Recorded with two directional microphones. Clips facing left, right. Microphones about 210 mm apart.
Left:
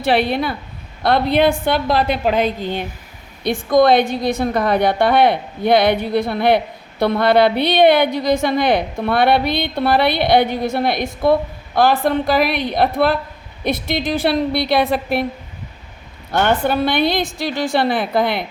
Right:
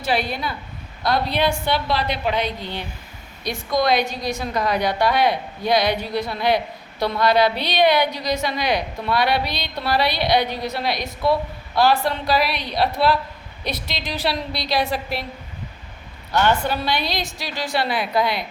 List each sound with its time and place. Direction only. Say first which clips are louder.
0.0 s a woman's voice: left 7 dB; 60° left (ahead or behind)
16.3 s a woman's voice: left 3 dB; 55° left (ahead or behind)